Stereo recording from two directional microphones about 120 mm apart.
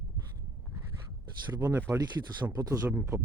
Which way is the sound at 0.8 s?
30° right (ahead or behind).